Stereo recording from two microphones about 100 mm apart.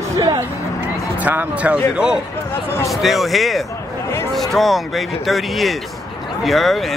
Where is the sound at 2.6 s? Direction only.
25° left (ahead or behind).